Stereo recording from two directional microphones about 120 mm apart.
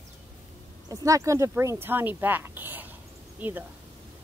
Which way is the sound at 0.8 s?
30° right (ahead or behind).